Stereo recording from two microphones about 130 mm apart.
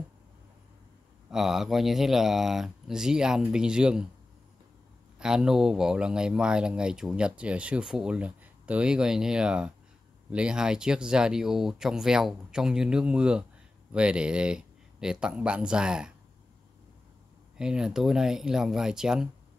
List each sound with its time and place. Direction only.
1.3 s speech: 5° right (ahead or behind)
5.2 s speech: 5° right (ahead or behind)
17.6 s speech: 5° right (ahead or behind)